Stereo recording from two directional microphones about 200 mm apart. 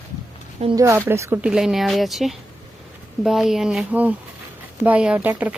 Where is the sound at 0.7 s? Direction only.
15° right (ahead or behind).